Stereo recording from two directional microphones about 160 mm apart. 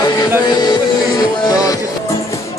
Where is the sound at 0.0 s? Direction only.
25° left (ahead or behind).